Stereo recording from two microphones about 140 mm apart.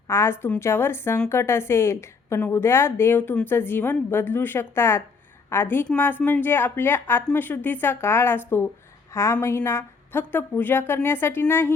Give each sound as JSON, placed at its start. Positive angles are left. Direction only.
{"t": 0.1, "sound": "a woman's voice", "side_deg": 20}